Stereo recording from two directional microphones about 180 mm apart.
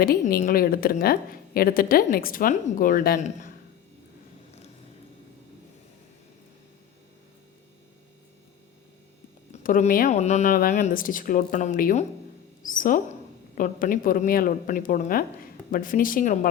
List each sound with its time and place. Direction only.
0.0 s a woman's voice: 55° left (ahead or behind)
3.2 s a man's voice: 40° left (ahead or behind)
9.5 s a woman's voice: 45° left (ahead or behind)